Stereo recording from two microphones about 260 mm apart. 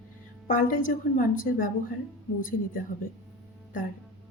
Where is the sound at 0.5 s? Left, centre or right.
Left.